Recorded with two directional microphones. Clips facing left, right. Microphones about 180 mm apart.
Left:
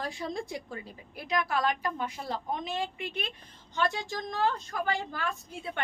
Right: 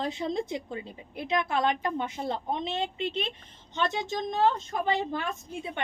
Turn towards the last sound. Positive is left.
turn(degrees=-20)  # may be behind; listen again after turning